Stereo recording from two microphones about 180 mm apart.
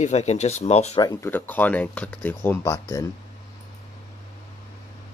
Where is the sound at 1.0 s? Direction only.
10° left (ahead or behind).